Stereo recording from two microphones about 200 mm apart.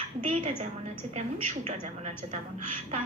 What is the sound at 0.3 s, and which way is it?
A woman's voice, 35° right (ahead or behind).